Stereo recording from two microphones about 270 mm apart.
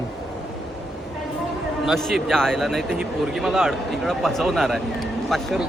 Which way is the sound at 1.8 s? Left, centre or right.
Centre.